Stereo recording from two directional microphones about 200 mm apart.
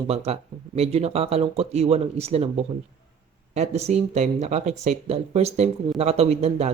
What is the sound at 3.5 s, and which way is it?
Speech, 35° right (ahead or behind).